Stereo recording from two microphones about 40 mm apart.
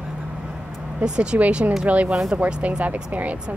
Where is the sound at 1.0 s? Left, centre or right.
Right.